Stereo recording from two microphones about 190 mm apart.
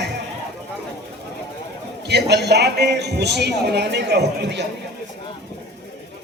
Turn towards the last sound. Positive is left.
turn(degrees=-60)  # may be behind; listen again after turning